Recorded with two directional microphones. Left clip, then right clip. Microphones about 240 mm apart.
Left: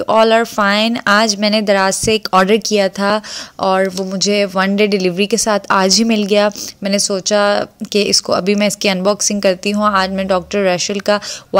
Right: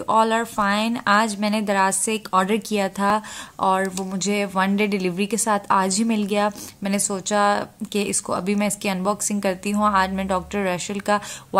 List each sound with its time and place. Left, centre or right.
0.0 s speech: left